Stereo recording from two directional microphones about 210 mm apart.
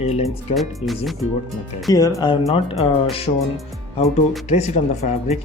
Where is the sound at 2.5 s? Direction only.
30° left (ahead or behind).